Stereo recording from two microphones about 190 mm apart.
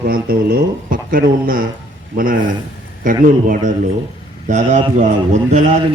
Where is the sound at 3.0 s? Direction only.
45° right (ahead or behind).